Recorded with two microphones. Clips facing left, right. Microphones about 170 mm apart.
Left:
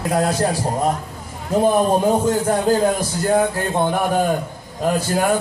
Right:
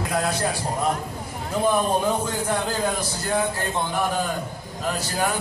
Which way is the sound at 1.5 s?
40° left (ahead or behind).